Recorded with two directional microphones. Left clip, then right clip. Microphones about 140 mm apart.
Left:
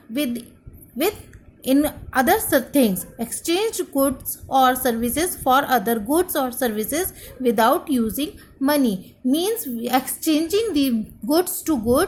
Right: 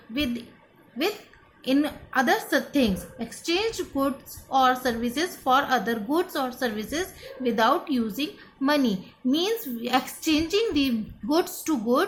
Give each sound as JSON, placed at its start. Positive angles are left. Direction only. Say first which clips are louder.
{"t": 0.1, "sound": "a woman's voice", "louder": "left 3 dB", "side_deg": 45}
{"t": 1.6, "sound": "a woman's voice", "louder": "left 5 dB", "side_deg": 50}